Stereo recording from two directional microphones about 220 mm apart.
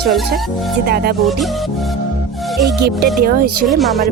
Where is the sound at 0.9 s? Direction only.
45° right (ahead or behind).